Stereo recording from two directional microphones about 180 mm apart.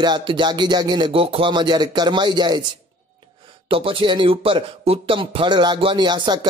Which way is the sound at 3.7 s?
30° right (ahead or behind).